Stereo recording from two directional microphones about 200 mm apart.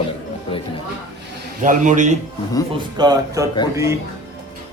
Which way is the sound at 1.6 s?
40° right (ahead or behind).